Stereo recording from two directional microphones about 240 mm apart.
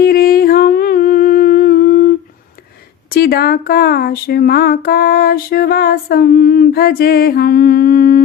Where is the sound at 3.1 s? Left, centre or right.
Left.